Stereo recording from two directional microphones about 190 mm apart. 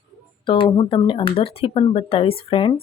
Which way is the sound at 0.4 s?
25° left (ahead or behind).